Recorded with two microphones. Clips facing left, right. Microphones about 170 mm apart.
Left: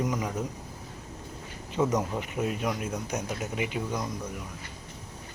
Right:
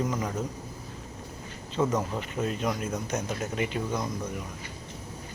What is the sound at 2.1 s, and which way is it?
Speech, 15° left (ahead or behind).